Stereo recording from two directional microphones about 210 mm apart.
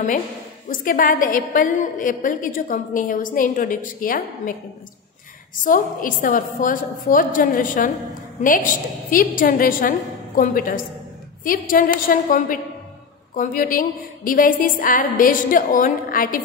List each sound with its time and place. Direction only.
0.7 s a woman's voice: 40° left (ahead or behind)
5.6 s a woman's voice: 40° left (ahead or behind)